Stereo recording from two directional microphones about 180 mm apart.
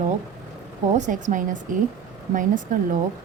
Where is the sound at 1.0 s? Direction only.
45° right (ahead or behind).